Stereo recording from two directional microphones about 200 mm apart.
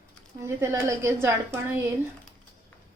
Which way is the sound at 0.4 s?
15° right (ahead or behind).